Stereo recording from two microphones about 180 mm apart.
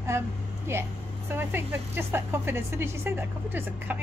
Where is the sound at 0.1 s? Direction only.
15° right (ahead or behind).